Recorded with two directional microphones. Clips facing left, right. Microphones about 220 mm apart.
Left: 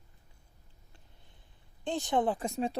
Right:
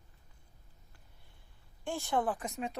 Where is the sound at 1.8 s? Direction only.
20° left (ahead or behind).